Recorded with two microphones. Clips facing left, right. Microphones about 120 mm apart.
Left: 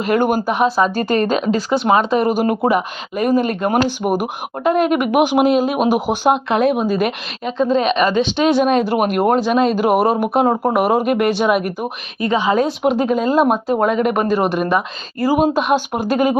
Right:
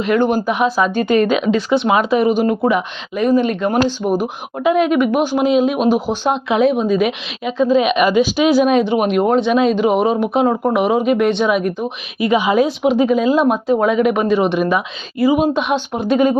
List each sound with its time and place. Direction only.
0.0 s speech: 45° left (ahead or behind)
3.8 s speech: 15° left (ahead or behind)
4.6 s speech: centre (ahead or behind)
5.1 s speech: 15° left (ahead or behind)
5.5 s speech: 5° left (ahead or behind)
12.2 s a woman's voice: 10° right (ahead or behind)
12.9 s speech: centre (ahead or behind)